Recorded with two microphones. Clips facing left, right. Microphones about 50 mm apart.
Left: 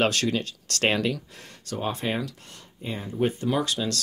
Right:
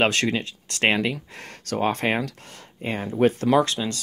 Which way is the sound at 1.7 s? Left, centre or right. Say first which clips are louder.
Right 5 dB; right.